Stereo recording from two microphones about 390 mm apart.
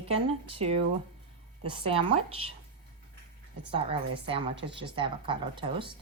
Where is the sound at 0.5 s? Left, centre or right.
Centre.